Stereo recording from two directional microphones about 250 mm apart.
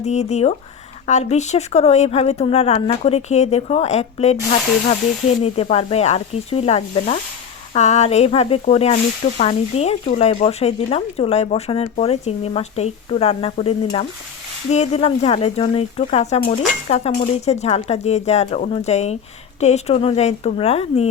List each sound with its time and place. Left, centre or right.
0.0 s speech: left
5.4 s speech: left